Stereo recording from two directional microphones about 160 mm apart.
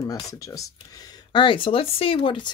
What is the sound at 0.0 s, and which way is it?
Speech, 20° left (ahead or behind).